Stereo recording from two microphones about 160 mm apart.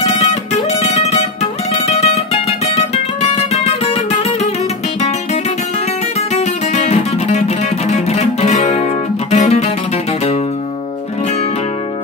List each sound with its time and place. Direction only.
0.0 s music: 45° left (ahead or behind)
3.5 s music: 40° left (ahead or behind)
6.3 s music: 45° left (ahead or behind)